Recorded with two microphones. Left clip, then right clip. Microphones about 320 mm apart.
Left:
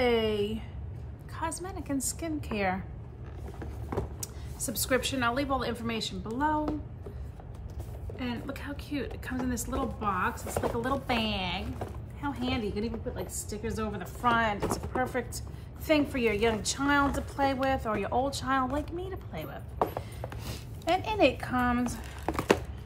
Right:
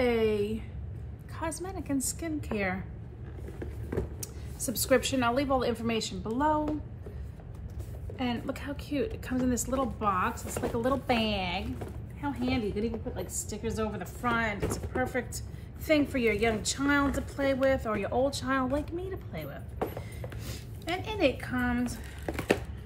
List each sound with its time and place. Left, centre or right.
0.0 s a sound: centre
1.3 s a woman's voice: centre
4.2 s a woman's voice: centre
8.2 s a woman's voice: centre